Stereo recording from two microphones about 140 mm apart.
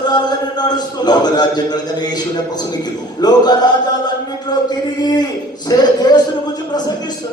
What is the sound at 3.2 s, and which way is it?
Speech, 30° left (ahead or behind).